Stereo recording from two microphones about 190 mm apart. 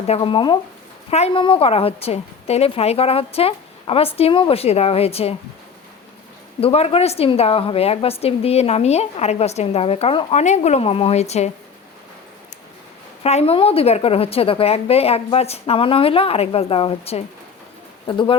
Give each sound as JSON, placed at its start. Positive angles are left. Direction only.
{"t": 0.1, "sound": "a woman's voice", "side_deg": 25}
{"t": 6.6, "sound": "a woman's voice", "side_deg": 30}
{"t": 13.2, "sound": "a woman's voice", "side_deg": 30}